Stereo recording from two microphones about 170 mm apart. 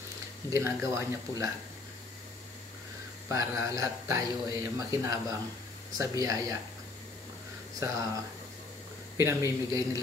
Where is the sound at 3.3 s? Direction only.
15° right (ahead or behind).